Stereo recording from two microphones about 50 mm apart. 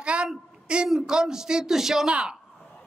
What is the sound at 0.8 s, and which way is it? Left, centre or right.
A man's voice, centre.